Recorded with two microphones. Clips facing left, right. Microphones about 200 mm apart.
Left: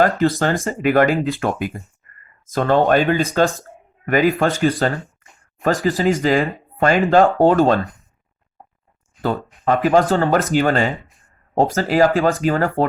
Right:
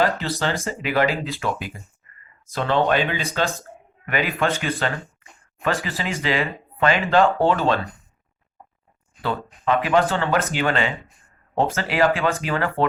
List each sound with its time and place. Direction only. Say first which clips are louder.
0.0 s speech: left 6 dB; 50° left (ahead or behind)
9.6 s speech: left 4 dB; 45° left (ahead or behind)